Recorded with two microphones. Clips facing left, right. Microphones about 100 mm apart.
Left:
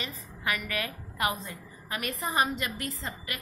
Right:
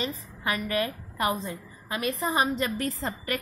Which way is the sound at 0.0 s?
30° right (ahead or behind).